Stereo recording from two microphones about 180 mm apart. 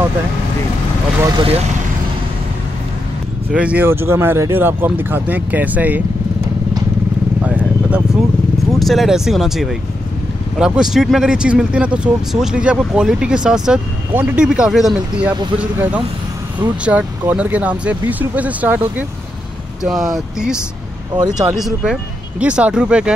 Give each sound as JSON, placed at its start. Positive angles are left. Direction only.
{"t": 1.3, "sound": "speech", "side_deg": -30}
{"t": 3.5, "sound": "speech", "side_deg": -5}
{"t": 7.4, "sound": "vehicle", "side_deg": -10}
{"t": 8.7, "sound": "speech", "side_deg": 0}
{"t": 21.1, "sound": "speech", "side_deg": -20}
{"t": 21.5, "sound": "speech", "side_deg": 0}